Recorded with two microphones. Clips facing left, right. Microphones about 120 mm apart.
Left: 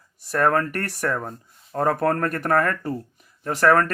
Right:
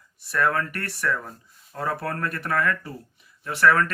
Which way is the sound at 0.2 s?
45° left (ahead or behind).